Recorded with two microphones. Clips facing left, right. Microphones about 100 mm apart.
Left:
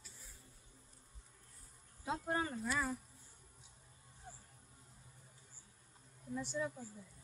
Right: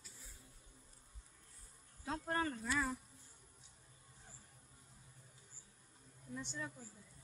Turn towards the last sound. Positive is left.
turn(degrees=5)  # may be behind; listen again after turning